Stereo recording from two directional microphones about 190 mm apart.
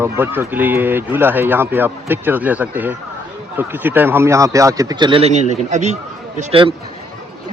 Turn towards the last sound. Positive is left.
turn(degrees=-35)  # may be behind; listen again after turning